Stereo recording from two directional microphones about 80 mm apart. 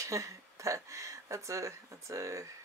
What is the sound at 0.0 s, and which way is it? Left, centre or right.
Speech, right.